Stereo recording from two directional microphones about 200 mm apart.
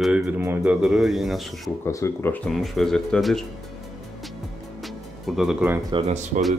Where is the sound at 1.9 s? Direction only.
15° left (ahead or behind).